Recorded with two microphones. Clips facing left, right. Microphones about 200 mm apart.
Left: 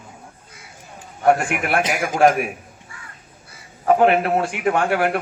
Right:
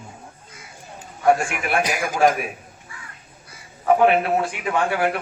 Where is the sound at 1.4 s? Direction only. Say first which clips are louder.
Left 2 dB; 60° left (ahead or behind).